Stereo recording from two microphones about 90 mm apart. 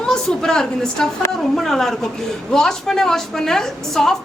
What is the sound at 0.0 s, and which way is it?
A woman's voice, 5° left (ahead or behind).